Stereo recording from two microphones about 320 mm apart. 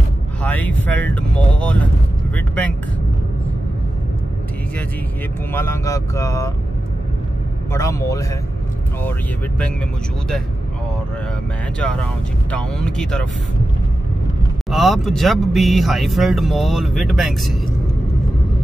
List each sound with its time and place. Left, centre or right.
0.4 s speech: centre
5.5 s speech: centre
7.7 s speech: centre
11.8 s speech: centre
14.7 s speech: centre